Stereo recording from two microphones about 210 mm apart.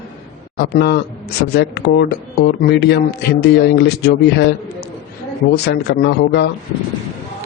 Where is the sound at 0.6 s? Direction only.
55° left (ahead or behind).